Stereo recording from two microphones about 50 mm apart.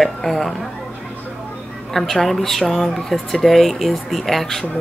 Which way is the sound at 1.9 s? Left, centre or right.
Centre.